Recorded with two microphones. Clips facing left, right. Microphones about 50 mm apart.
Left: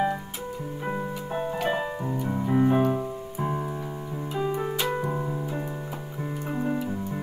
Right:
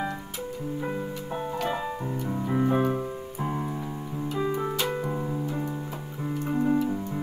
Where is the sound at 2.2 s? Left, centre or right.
Centre.